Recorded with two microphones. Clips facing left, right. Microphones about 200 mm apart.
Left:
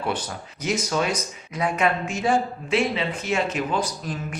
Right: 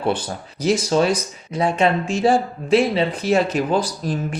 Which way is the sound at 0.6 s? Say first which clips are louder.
Right 7 dB; 30° right (ahead or behind).